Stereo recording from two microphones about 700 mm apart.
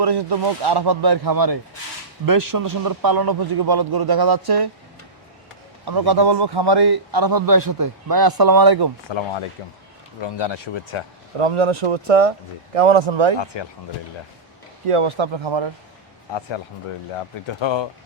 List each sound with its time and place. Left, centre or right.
0.0 s a man's voice: right
5.8 s a man's voice: right
9.0 s speech: left
11.3 s speech: right
13.4 s speech: left
14.8 s a man's voice: right
17.2 s speech: left